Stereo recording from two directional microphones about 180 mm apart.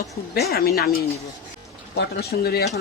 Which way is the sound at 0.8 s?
60° left (ahead or behind).